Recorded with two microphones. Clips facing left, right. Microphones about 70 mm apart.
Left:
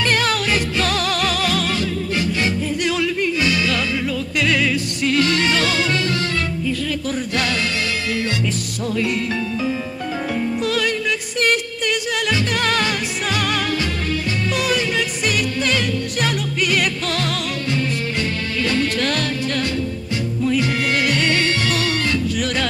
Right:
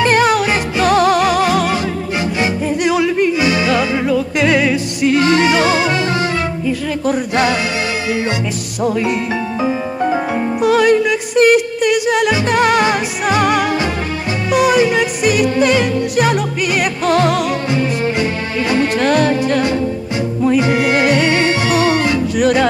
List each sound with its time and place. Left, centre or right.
0.0 s music: centre
7.1 s music: centre
8.8 s music: right
10.6 s music: right